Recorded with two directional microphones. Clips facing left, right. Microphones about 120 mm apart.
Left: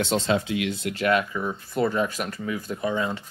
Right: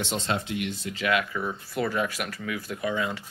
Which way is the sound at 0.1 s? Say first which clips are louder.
Left 5 dB; 85° left.